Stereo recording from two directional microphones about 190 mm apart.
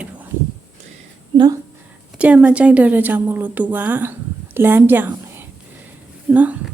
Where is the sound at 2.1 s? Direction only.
5° right (ahead or behind).